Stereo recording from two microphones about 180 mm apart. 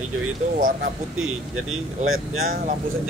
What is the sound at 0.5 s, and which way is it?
Speech, 50° right (ahead or behind).